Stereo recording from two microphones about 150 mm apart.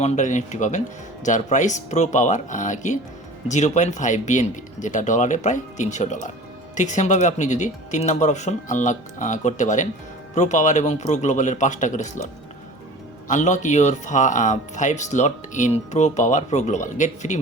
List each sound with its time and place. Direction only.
0.0 s speech: 55° left (ahead or behind)